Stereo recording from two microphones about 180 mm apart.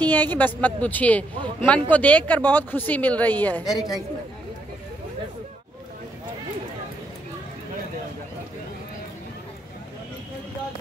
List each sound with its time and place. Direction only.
0.0 s speech: 10° left (ahead or behind)
3.6 s a woman's voice: 20° left (ahead or behind)